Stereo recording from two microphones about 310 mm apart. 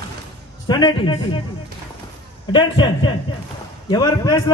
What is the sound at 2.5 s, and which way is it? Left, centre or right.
A man's voice, centre.